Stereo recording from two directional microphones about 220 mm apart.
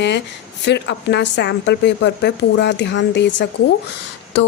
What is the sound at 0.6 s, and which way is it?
Speech, 50° left (ahead or behind).